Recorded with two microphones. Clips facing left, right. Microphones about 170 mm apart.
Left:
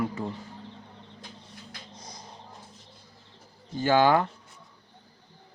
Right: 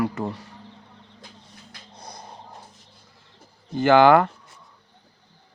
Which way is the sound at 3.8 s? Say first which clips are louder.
Right 6 dB; 75° right (ahead or behind).